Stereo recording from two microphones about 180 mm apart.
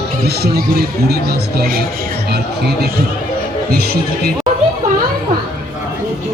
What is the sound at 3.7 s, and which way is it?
Speech, 55° right (ahead or behind).